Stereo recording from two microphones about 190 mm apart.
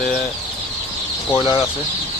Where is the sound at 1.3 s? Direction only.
25° left (ahead or behind).